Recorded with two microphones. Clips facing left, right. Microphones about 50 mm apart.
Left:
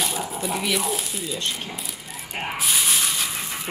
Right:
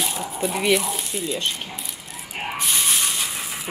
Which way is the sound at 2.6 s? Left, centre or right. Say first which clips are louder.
Even; centre.